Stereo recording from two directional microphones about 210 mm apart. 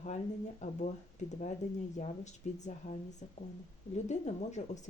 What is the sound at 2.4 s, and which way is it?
Speech, 35° left (ahead or behind).